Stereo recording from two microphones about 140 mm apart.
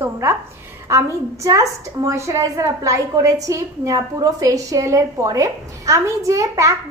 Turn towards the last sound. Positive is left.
turn(degrees=-20)  # may be behind; listen again after turning